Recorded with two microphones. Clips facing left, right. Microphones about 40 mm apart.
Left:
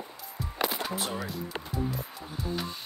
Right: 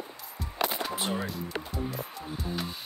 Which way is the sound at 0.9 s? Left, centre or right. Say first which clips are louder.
Right 2 dB; right.